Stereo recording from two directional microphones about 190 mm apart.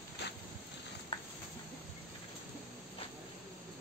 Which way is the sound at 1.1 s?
25° left (ahead or behind).